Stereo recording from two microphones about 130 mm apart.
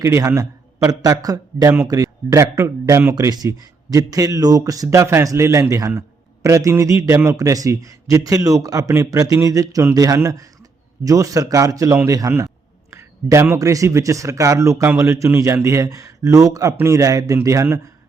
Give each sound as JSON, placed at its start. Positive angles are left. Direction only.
{"t": 0.0, "sound": "a man's voice", "side_deg": -20}